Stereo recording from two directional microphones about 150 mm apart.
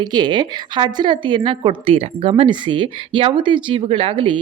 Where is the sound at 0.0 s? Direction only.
30° right (ahead or behind).